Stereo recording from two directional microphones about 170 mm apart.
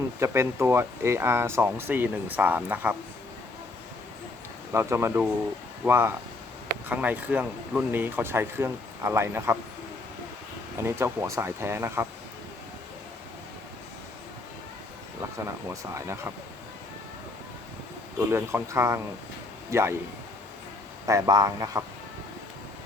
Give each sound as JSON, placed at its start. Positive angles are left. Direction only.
{"t": 0.2, "sound": "speech", "side_deg": -15}
{"t": 4.7, "sound": "speech", "side_deg": -15}
{"t": 10.8, "sound": "speech", "side_deg": -15}
{"t": 15.4, "sound": "speech", "side_deg": -20}
{"t": 18.3, "sound": "speech", "side_deg": -15}
{"t": 21.1, "sound": "speech", "side_deg": -20}